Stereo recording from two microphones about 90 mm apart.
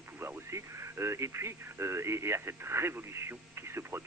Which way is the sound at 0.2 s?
30° right (ahead or behind).